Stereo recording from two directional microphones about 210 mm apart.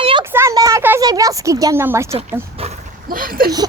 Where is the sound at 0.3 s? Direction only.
10° right (ahead or behind).